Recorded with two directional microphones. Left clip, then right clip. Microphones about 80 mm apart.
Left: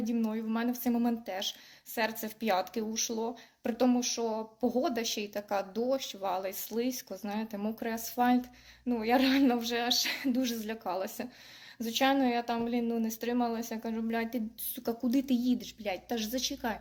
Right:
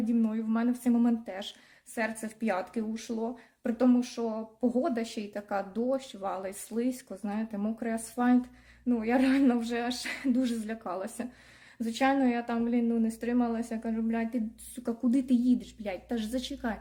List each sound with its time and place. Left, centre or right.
0.0 s a woman's voice: right
13.9 s a woman's voice: right